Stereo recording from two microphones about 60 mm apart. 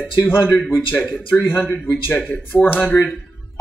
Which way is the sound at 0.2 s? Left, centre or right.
Left.